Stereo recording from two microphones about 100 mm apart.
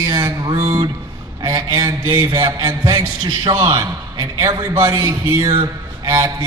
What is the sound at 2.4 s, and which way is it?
A man's voice, 45° right (ahead or behind).